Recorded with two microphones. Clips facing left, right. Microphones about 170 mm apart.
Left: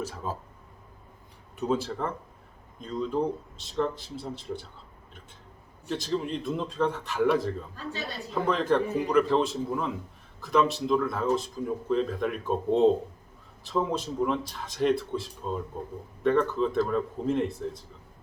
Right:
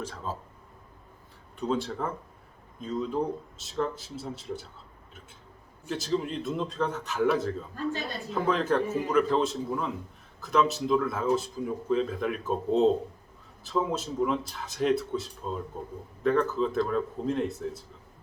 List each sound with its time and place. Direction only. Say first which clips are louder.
0.0 s speech: left 2 dB; 10° left (ahead or behind)
1.5 s speech: left 1 dB; 5° left (ahead or behind)
5.9 s speech: even; centre (ahead or behind)